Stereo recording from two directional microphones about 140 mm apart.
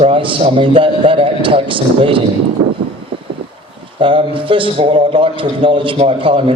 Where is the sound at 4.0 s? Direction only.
40° right (ahead or behind).